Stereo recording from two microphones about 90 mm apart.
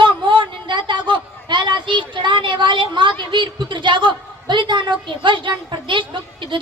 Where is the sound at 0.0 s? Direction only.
60° right (ahead or behind).